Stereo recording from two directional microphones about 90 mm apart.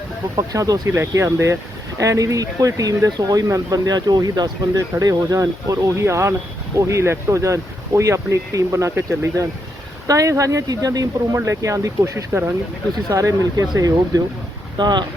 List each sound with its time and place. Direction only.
0.3 s speech: 40° right (ahead or behind)
10.1 s speech: 40° right (ahead or behind)
12.3 s speech: 25° right (ahead or behind)
13.1 s speech: 40° right (ahead or behind)
14.8 s speech: 55° right (ahead or behind)